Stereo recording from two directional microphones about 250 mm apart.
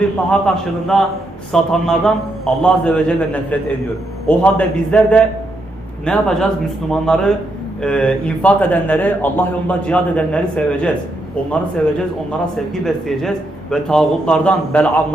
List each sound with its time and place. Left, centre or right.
0.3 s speech: centre
12.7 s speech: centre